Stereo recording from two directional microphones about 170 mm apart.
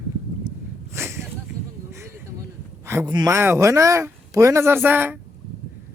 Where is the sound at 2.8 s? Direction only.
15° right (ahead or behind).